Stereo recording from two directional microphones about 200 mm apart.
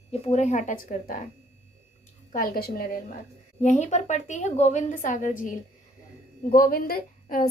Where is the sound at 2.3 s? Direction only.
45° left (ahead or behind).